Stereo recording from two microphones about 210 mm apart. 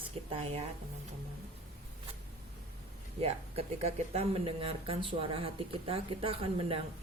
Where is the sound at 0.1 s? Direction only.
30° right (ahead or behind).